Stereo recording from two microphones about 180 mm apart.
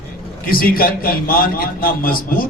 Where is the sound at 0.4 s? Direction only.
55° left (ahead or behind).